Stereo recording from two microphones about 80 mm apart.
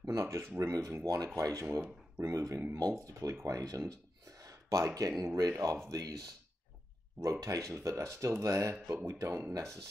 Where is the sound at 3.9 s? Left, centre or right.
Right.